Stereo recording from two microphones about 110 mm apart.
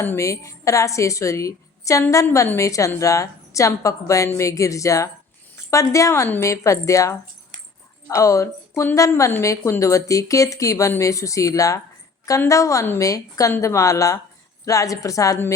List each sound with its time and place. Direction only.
0.0 s a woman's voice: 25° left (ahead or behind)